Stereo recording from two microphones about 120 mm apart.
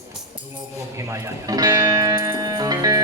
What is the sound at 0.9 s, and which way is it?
Music, 30° right (ahead or behind).